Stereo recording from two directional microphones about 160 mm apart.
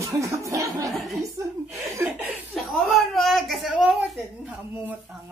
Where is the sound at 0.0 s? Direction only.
20° right (ahead or behind).